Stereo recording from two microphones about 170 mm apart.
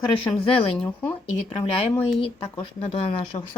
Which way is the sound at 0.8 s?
5° left (ahead or behind).